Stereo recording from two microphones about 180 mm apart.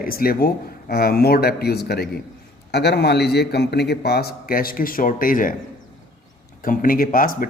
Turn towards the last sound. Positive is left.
turn(degrees=50)  # may be behind; listen again after turning